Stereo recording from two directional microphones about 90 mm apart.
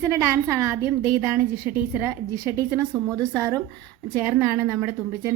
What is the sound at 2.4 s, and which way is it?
Speech, 30° right (ahead or behind).